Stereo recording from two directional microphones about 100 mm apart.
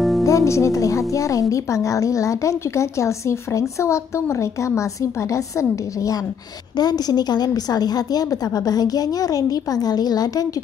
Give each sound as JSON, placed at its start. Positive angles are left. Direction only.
{"t": 0.2, "sound": "speech", "side_deg": 30}
{"t": 6.8, "sound": "speech", "side_deg": 45}